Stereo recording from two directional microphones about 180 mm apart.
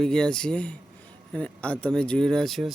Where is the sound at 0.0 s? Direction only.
5° left (ahead or behind).